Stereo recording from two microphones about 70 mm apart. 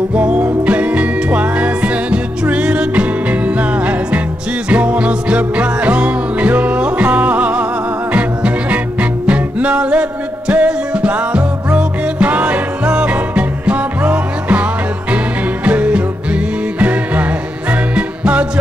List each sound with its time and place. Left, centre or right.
0.1 s music: centre